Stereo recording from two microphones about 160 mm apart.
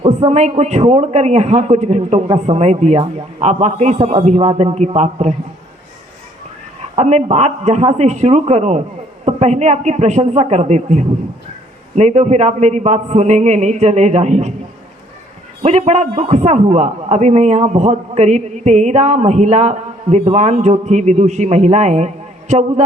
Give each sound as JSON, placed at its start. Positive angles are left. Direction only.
{"t": 0.0, "sound": "a man's voice", "side_deg": -40}
{"t": 6.9, "sound": "a man's voice", "side_deg": -45}
{"t": 15.6, "sound": "a man's voice", "side_deg": -45}